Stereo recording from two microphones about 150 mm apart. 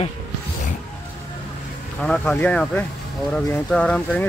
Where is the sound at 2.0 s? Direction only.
5° left (ahead or behind).